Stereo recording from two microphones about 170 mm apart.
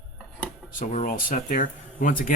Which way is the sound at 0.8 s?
50° left (ahead or behind).